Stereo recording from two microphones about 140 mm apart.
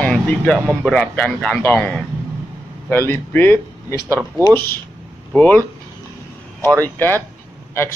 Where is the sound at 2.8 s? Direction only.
15° left (ahead or behind).